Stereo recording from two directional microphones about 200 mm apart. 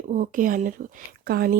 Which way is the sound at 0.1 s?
40° right (ahead or behind).